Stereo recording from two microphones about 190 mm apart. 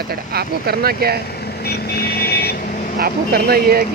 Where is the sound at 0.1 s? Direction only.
55° right (ahead or behind).